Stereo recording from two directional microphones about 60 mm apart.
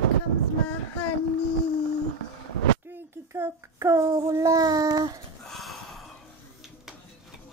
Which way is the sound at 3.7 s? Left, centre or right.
Right.